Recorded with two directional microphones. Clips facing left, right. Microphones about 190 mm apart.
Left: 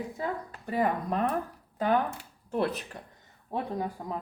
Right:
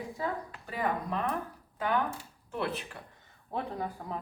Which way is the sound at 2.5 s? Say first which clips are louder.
Left 5 dB; 40° left (ahead or behind).